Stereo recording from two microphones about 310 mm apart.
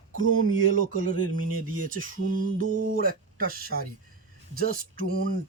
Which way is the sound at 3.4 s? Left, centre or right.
Right.